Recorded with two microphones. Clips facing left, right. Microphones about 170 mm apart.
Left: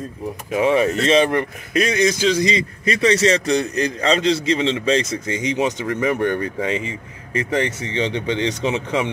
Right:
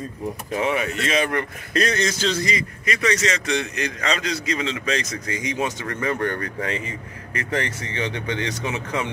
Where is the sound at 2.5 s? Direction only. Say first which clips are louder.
Left 5 dB; 30° left (ahead or behind).